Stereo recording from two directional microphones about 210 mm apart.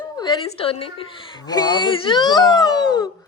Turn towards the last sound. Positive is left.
turn(degrees=20)  # may be behind; listen again after turning